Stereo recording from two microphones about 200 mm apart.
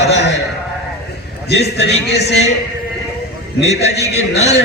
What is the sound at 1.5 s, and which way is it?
Speech, 55° left (ahead or behind).